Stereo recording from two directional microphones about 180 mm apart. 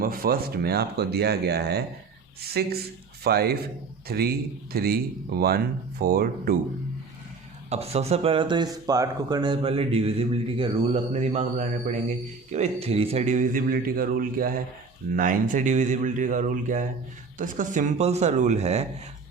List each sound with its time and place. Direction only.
0.0 s speech: 55° right (ahead or behind)
6.0 s speech: 60° right (ahead or behind)
7.7 s a man's voice: 35° right (ahead or behind)